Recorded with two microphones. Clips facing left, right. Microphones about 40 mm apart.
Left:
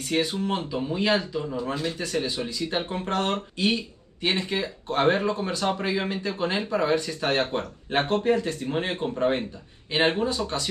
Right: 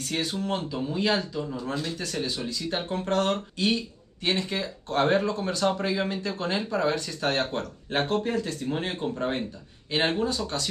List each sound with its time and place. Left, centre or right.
0.0 s speech: centre